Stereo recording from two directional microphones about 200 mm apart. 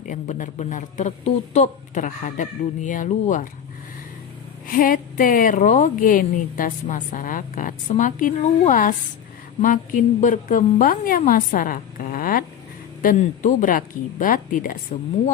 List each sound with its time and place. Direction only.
0.1 s a woman's voice: 40° left (ahead or behind)
4.7 s a woman's voice: 45° left (ahead or behind)